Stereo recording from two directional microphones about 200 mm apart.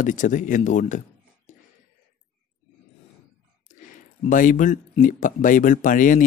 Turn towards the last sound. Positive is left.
turn(degrees=40)  # may be behind; listen again after turning